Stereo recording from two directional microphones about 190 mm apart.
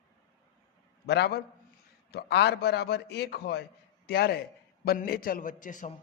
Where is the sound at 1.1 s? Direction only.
60° left (ahead or behind); by 5.9 s 45° left (ahead or behind).